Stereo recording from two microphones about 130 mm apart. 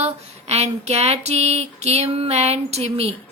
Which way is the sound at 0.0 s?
55° right (ahead or behind).